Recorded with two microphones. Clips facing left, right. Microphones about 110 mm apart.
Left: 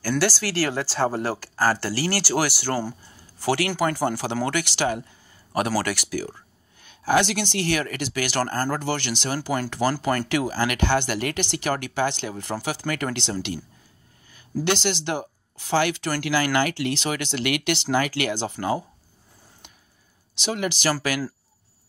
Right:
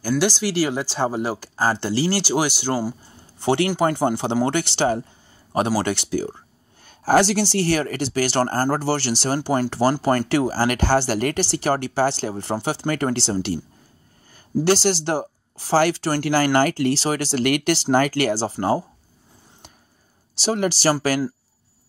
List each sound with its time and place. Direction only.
0.2 s speech: 15° right (ahead or behind)
3.2 s speech: 25° right (ahead or behind)
6.9 s speech: 35° right (ahead or behind)
14.6 s speech: 35° right (ahead or behind)
20.3 s speech: 35° right (ahead or behind)